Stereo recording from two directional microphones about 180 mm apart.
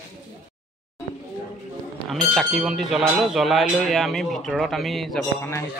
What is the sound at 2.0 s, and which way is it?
Speech, centre (ahead or behind).